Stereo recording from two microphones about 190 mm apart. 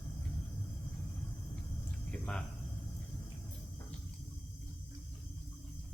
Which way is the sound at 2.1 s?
5° left (ahead or behind).